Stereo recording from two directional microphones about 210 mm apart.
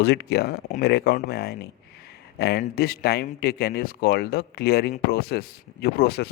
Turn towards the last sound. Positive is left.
turn(degrees=50)  # may be behind; listen again after turning